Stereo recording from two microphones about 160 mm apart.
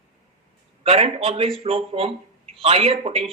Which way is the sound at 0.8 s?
35° right (ahead or behind).